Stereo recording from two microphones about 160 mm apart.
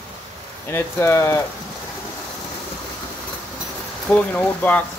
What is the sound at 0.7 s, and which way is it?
Speech, 15° left (ahead or behind).